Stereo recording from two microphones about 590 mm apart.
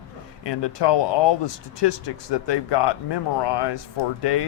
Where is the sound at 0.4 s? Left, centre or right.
Left.